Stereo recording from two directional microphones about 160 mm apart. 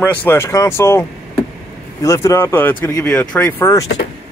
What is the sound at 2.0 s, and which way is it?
Speech, 20° left (ahead or behind).